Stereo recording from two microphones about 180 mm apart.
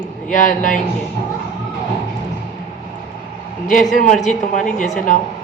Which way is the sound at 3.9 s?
45° left (ahead or behind).